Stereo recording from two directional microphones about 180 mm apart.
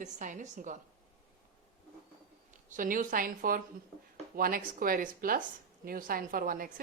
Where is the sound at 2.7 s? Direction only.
50° right (ahead or behind).